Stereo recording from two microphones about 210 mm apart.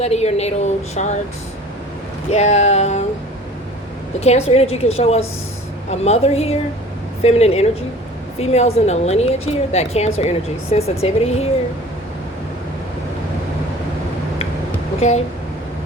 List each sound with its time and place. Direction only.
0.0 s a woman's voice: 30° left (ahead or behind)
2.3 s a woman's voice: 30° left (ahead or behind)
4.2 s a woman's voice: 30° left (ahead or behind)